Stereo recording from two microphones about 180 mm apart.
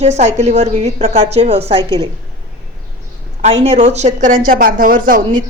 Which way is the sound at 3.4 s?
35° right (ahead or behind).